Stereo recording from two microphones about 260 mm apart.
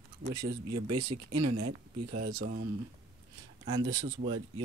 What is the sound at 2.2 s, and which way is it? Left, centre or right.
Speech, right.